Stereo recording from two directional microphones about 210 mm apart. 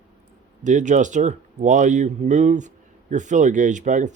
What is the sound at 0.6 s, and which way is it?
Speech, 35° right (ahead or behind).